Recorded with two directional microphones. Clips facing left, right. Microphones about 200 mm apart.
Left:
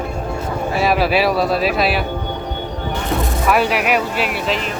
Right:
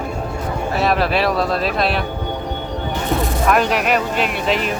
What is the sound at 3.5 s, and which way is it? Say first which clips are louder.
Speech: left 1 dB; 10° left (ahead or behind).